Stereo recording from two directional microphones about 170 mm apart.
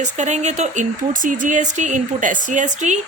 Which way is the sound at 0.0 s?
45° right (ahead or behind).